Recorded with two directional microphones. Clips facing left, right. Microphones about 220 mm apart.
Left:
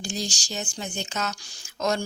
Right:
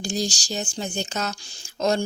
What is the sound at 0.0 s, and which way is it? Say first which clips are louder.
Speech: right 5 dB; 40° right (ahead or behind).